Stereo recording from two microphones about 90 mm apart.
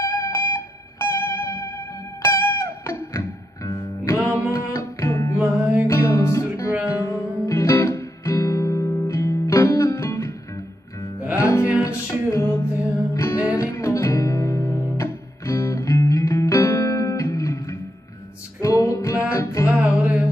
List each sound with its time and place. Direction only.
0.0 s music: 30° left (ahead or behind)
5.4 s music: 20° right (ahead or behind)
5.9 s music: 35° left (ahead or behind)
11.4 s music: 30° left (ahead or behind)
19.7 s music: 15° right (ahead or behind)